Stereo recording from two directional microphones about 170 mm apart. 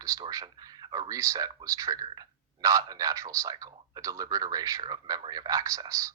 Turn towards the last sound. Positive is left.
turn(degrees=-20)  # may be behind; listen again after turning